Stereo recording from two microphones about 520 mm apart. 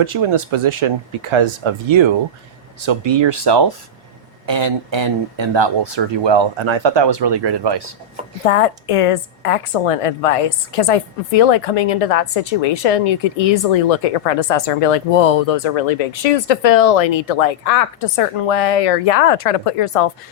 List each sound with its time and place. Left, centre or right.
0.0 s speech: right
8.4 s speech: left